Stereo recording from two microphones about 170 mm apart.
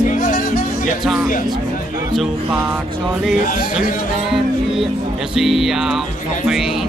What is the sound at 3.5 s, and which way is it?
Speech, 50° left (ahead or behind).